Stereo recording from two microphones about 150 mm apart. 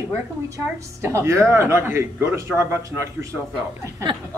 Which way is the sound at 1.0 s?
20° right (ahead or behind).